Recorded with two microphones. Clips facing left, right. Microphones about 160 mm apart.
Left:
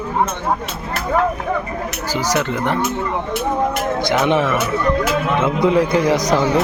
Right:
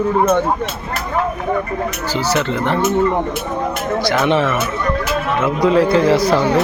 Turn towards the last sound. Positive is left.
turn(degrees=15)  # may be behind; listen again after turning